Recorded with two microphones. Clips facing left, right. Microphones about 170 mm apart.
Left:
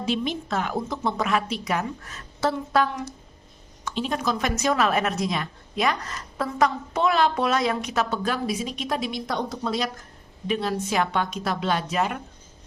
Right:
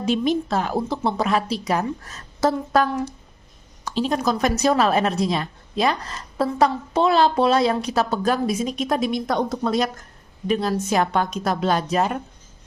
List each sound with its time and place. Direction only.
0.0 s a woman's voice: 40° right (ahead or behind)
10.4 s a woman's voice: 40° right (ahead or behind)